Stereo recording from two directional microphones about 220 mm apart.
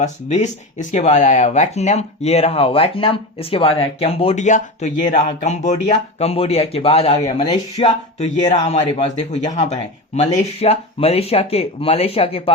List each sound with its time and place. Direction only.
0.0 s a man's voice: 30° left (ahead or behind)